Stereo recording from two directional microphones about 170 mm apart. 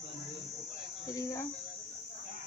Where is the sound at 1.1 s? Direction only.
20° left (ahead or behind).